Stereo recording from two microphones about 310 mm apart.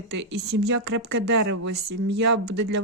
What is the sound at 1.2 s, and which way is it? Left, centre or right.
Speech, right.